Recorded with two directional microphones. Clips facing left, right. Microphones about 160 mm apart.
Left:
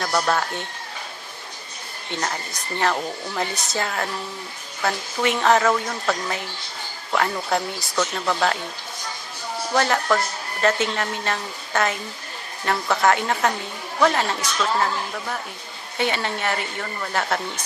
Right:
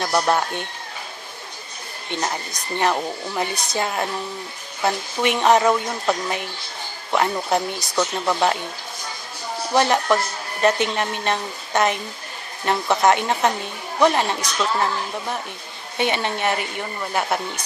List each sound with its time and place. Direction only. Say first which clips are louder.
0.0 s speech: right 2 dB; 15° right (ahead or behind)
2.2 s speech: right 2 dB; 20° right (ahead or behind)
9.7 s speech: right 2 dB; 20° right (ahead or behind)
16.0 s speech: right 2 dB; 20° right (ahead or behind)